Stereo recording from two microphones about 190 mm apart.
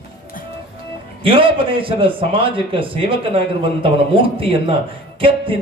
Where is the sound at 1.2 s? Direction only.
30° right (ahead or behind).